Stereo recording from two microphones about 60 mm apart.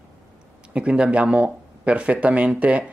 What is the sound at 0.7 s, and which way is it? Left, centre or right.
Speech, centre.